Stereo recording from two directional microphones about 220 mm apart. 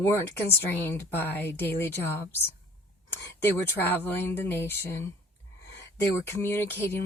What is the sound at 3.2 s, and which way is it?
Speech, 10° left (ahead or behind).